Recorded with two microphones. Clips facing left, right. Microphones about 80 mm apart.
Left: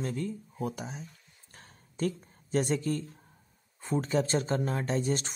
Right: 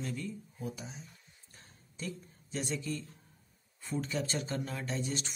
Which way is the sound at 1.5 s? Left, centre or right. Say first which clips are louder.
Left 6 dB; left.